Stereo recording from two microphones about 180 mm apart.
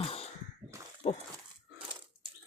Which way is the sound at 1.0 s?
40° left (ahead or behind).